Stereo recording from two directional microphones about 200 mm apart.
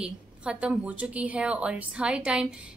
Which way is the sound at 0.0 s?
5° right (ahead or behind).